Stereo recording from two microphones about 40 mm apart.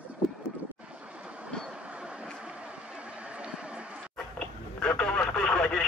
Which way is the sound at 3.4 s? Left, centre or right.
Right.